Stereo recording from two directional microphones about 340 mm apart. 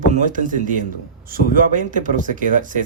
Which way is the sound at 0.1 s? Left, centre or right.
Right.